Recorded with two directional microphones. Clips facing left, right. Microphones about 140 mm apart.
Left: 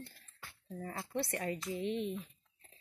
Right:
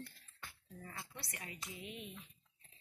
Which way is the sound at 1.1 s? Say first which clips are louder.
Left 15 dB; 60° left (ahead or behind).